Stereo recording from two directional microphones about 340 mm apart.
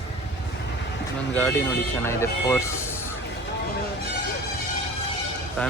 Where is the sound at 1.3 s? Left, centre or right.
Centre.